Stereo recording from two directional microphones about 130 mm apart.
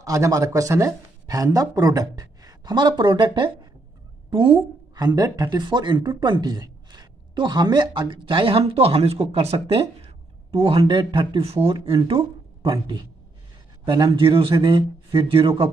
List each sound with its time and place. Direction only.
0.0 s speech: 25° right (ahead or behind); by 15.7 s 45° right (ahead or behind)